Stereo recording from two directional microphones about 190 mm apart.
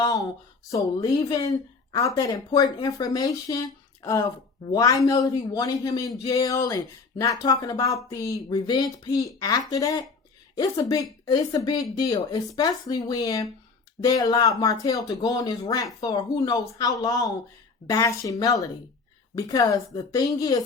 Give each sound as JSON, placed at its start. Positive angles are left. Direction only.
{"t": 0.0, "sound": "a sound", "side_deg": 20}
{"t": 0.7, "sound": "speech", "side_deg": 20}
{"t": 11.3, "sound": "speech", "side_deg": 20}